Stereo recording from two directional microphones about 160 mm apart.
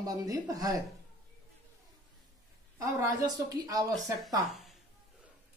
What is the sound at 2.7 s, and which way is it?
Speech, 20° right (ahead or behind).